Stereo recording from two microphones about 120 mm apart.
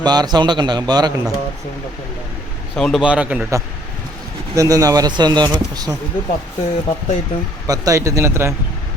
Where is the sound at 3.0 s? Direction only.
10° right (ahead or behind).